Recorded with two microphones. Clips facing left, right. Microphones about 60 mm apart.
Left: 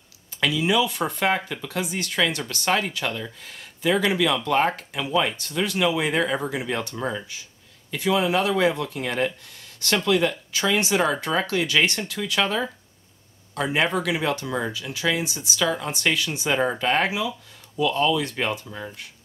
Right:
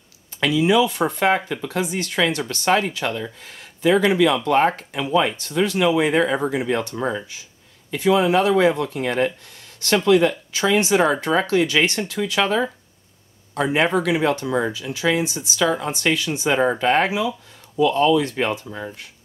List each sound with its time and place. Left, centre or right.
0.8 s speech: centre
15.0 s speech: right
15.3 s speech: centre
16.1 s speech: centre